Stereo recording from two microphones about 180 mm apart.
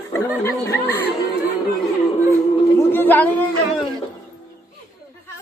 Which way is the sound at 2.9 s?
10° left (ahead or behind).